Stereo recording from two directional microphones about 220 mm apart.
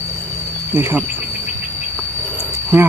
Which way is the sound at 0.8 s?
10° right (ahead or behind).